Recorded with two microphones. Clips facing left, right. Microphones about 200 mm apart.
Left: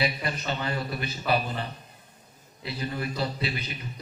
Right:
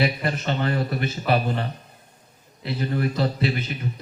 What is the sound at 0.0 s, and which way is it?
A man's voice, 50° right (ahead or behind).